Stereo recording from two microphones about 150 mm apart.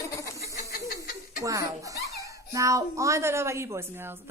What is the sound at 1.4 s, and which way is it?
Speech, 20° right (ahead or behind).